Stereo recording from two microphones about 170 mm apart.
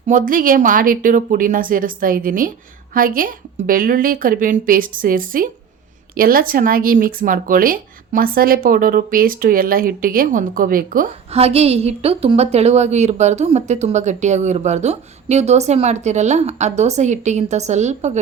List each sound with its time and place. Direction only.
0.1 s a woman's voice: 55° right (ahead or behind)
11.3 s a woman's voice: 35° right (ahead or behind)